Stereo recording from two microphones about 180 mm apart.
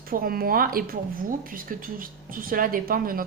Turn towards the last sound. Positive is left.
turn(degrees=-50)  # may be behind; listen again after turning